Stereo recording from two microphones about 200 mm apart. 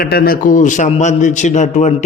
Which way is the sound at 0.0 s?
50° left (ahead or behind).